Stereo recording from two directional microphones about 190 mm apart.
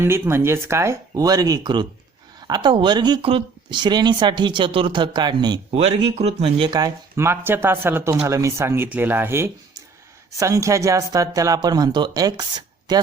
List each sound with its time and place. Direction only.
0.0 s speech: 15° right (ahead or behind)